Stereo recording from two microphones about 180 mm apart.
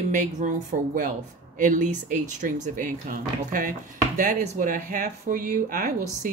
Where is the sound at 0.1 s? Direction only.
45° right (ahead or behind).